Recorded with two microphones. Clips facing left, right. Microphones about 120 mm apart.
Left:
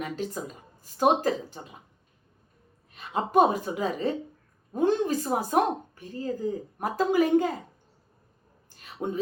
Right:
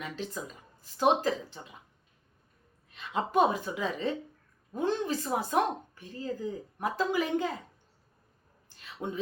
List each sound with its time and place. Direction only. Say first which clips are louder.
0.0 s a woman's voice: left 5 dB; 45° left (ahead or behind)
2.9 s a woman's voice: left 5 dB; 40° left (ahead or behind)
8.8 s a sound: left 5 dB; 45° left (ahead or behind)